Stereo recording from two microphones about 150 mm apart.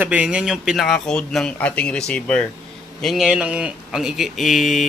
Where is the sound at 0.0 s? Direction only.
10° right (ahead or behind).